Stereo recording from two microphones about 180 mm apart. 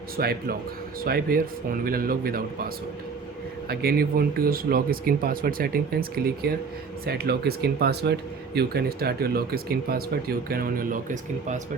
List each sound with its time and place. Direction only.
0.2 s speech: 60° right (ahead or behind); by 11.6 s 45° right (ahead or behind)